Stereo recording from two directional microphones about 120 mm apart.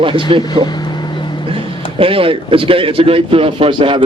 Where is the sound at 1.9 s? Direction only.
50° right (ahead or behind).